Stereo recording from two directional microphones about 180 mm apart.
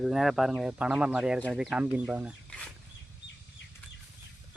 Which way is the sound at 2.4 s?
5° left (ahead or behind).